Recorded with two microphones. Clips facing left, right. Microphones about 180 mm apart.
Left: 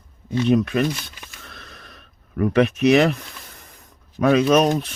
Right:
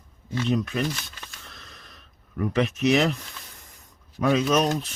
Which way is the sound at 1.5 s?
65° left (ahead or behind).